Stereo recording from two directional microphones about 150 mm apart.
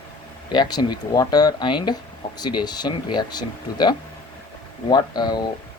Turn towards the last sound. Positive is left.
turn(degrees=30)  # may be behind; listen again after turning